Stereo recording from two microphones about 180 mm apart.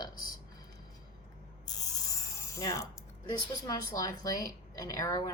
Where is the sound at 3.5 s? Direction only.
20° left (ahead or behind).